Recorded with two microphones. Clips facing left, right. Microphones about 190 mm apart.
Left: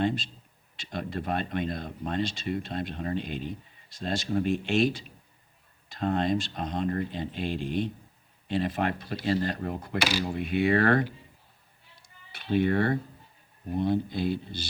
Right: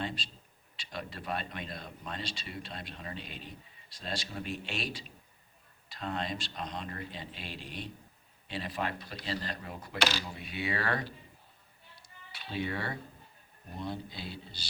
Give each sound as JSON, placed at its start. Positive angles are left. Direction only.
{"t": 0.0, "sound": "speech", "side_deg": 50}
{"t": 12.0, "sound": "cat", "side_deg": 55}
{"t": 13.7, "sound": "speech", "side_deg": 55}